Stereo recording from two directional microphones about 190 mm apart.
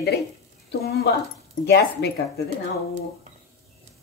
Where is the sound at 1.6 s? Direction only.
60° left (ahead or behind).